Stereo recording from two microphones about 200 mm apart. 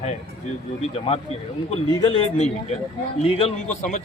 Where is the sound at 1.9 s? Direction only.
25° left (ahead or behind).